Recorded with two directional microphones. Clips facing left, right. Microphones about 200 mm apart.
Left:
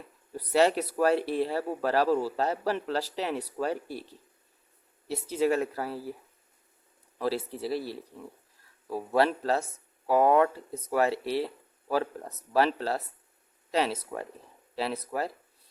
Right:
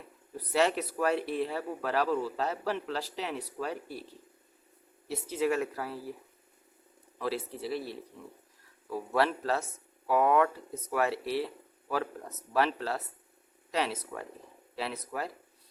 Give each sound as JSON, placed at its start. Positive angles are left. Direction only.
{"t": 0.5, "sound": "speech", "side_deg": 35}
{"t": 5.0, "sound": "speech", "side_deg": 30}
{"t": 7.2, "sound": "speech", "side_deg": 35}